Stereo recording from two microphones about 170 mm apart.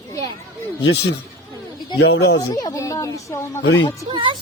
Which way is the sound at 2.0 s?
80° left.